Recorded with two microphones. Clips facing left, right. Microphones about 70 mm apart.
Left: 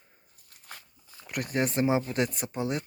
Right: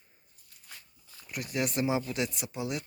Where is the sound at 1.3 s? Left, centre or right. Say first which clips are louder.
Left 4 dB; left.